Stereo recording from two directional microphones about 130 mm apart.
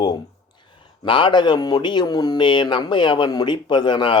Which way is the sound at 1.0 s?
40° left (ahead or behind).